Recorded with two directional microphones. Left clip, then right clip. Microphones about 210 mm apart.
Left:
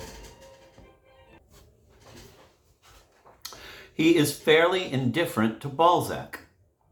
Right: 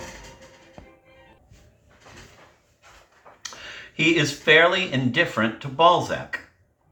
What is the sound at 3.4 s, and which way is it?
Speech, 55° left (ahead or behind).